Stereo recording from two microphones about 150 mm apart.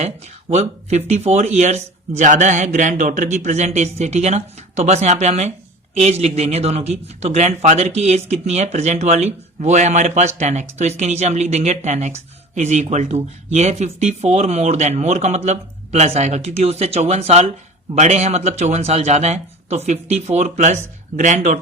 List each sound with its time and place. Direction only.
0.5 s a man's voice: 45° right (ahead or behind)